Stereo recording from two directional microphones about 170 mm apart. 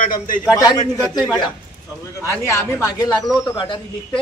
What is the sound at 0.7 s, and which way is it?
Speech, 25° left (ahead or behind).